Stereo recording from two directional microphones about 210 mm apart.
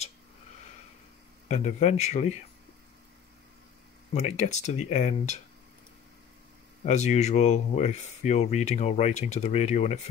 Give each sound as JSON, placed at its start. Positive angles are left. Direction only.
{"t": 1.5, "sound": "speech", "side_deg": 30}
{"t": 4.1, "sound": "speech", "side_deg": 30}
{"t": 6.8, "sound": "speech", "side_deg": 35}